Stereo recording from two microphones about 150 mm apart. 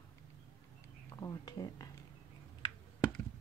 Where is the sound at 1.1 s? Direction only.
25° left (ahead or behind).